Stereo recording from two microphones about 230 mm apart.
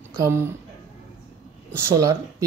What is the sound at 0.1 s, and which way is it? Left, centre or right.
Speech, centre.